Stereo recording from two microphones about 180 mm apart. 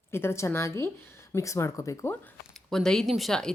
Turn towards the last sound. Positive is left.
turn(degrees=0)  # may be behind; listen again after turning